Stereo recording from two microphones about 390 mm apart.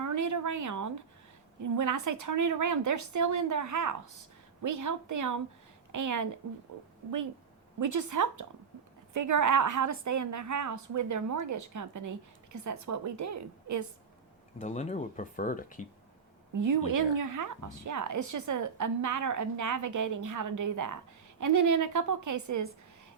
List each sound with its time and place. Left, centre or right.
0.0 s a sound: right
1.6 s a woman's voice: right
7.8 s a woman's voice: right
14.6 s speech: centre
16.6 s a woman's voice: right